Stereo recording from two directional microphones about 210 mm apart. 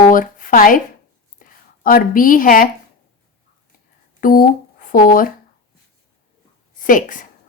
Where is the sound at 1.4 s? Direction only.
40° left (ahead or behind).